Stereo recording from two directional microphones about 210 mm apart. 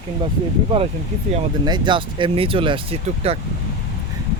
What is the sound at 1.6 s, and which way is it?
Speech, 20° right (ahead or behind).